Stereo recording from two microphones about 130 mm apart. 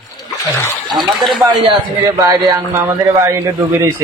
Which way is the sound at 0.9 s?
35° right (ahead or behind).